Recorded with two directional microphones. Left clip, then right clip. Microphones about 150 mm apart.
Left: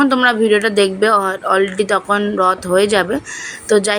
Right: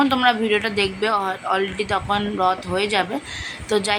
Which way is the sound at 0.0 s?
25° left (ahead or behind).